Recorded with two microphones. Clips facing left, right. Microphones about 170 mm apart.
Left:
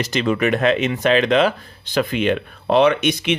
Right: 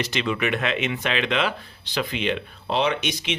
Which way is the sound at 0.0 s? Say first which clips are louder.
Left 6 dB; 45° left (ahead or behind).